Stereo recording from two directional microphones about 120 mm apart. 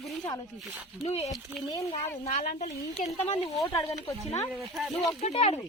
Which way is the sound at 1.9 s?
75° left (ahead or behind).